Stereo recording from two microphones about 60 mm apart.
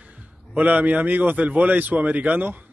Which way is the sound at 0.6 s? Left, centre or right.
Right.